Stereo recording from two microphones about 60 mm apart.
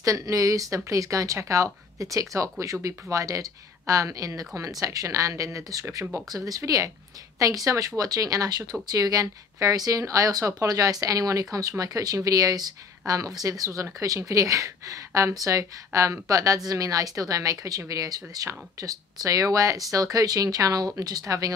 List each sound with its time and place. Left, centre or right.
0.0 s speech: right
8.9 s speech: right
11.8 s speech: right